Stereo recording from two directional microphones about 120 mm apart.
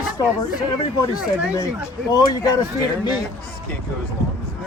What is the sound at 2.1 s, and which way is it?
Speech, 30° left (ahead or behind).